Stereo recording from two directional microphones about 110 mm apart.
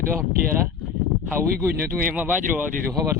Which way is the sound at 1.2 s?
20° right (ahead or behind).